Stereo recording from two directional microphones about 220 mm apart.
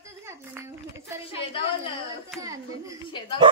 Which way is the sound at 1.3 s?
25° left (ahead or behind).